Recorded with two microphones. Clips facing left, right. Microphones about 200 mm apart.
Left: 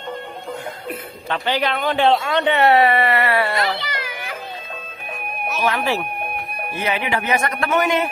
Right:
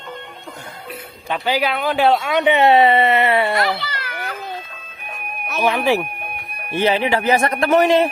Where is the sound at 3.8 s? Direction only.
15° left (ahead or behind).